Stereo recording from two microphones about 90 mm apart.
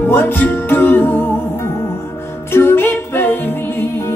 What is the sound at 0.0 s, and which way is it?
Music, 25° left (ahead or behind).